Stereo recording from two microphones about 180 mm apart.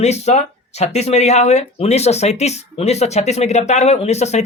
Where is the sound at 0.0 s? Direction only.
40° left (ahead or behind).